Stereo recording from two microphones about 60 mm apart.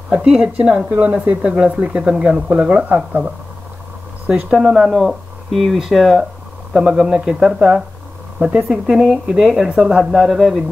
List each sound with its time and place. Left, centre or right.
0.1 s speech: centre
4.3 s speech: centre
6.7 s speech: centre